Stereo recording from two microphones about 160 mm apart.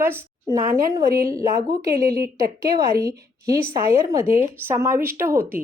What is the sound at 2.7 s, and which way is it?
A woman's voice, 20° right (ahead or behind).